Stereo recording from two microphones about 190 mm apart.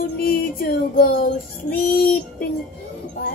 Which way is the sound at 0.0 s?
50° left (ahead or behind).